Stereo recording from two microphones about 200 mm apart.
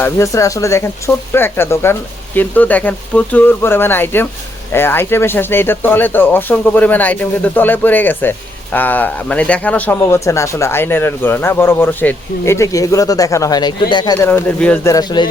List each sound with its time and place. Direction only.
0.0 s speech: 15° left (ahead or behind)
14.9 s speech: 20° left (ahead or behind)